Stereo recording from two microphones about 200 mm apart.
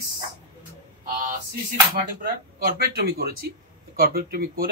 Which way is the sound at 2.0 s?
50° right (ahead or behind).